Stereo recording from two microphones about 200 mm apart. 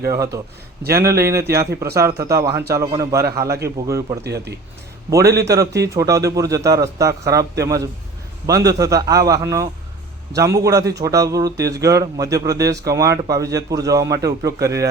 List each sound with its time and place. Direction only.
0.0 s a man's voice: 15° right (ahead or behind)
4.2 s speech: 55° right (ahead or behind)
5.1 s a man's voice: 15° right (ahead or behind)